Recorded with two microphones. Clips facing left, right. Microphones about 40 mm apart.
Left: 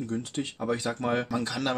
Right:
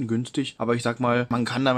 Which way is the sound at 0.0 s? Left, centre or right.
Right.